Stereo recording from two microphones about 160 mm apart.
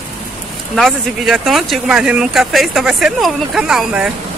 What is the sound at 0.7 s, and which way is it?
Speech, centre (ahead or behind).